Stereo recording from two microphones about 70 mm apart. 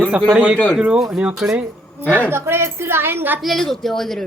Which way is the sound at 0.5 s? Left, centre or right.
Centre.